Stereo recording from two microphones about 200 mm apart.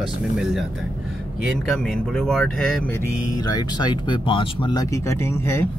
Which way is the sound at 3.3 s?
20° left (ahead or behind).